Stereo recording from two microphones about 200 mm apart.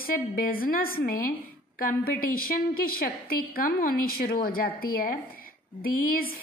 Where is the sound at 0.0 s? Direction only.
45° left (ahead or behind).